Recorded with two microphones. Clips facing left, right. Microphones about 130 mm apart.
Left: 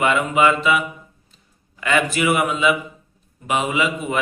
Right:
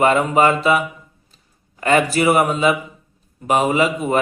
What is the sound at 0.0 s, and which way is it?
Speech, 40° right (ahead or behind).